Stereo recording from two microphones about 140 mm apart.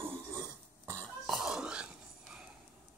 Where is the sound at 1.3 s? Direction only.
5° right (ahead or behind).